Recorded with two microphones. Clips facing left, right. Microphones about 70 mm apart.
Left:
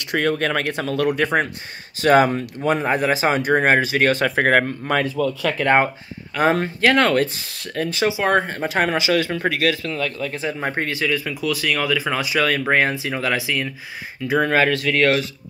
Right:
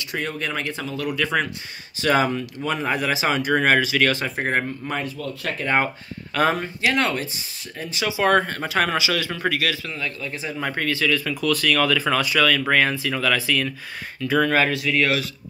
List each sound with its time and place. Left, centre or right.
0.0 s speech: left
1.1 s speech: left
4.2 s speech: left
5.6 s speech: left
6.5 s speech: left
8.1 s speech: centre
8.5 s speech: left
10.6 s speech: left
12.4 s speech: left
14.4 s speech: left